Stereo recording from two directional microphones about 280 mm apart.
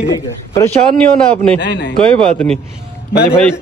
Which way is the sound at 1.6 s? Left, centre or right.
Left.